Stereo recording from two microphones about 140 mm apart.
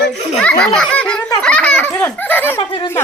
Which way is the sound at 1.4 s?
5° left (ahead or behind).